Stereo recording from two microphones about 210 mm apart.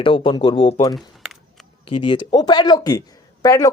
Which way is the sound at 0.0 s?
25° left (ahead or behind).